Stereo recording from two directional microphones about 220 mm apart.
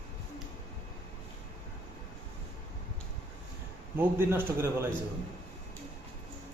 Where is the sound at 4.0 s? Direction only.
10° right (ahead or behind).